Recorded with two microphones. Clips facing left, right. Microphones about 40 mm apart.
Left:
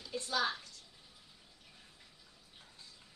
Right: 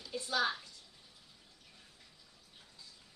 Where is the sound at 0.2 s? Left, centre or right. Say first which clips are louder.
Right 1 dB; centre.